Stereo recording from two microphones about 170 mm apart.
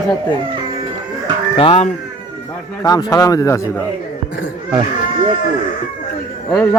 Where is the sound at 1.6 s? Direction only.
35° left (ahead or behind).